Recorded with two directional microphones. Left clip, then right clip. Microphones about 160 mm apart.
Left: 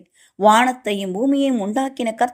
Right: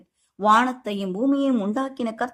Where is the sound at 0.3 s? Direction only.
10° left (ahead or behind).